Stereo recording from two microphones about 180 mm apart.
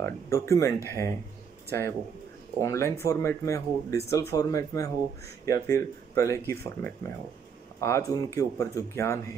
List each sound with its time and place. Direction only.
0.0 s speech: 15° left (ahead or behind)